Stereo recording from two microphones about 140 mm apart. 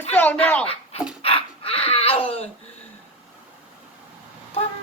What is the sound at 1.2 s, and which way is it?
Dog, 45° left (ahead or behind).